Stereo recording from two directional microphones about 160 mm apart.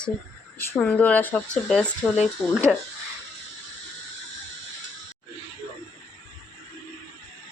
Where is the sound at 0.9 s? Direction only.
10° left (ahead or behind).